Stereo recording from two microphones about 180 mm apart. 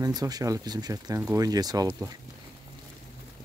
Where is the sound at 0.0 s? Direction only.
20° right (ahead or behind).